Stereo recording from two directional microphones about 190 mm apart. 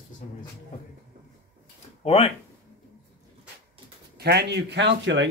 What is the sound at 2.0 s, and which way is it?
Speech, 30° left (ahead or behind).